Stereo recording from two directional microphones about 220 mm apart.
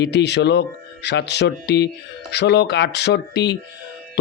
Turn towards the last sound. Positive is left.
turn(degrees=50)  # may be behind; listen again after turning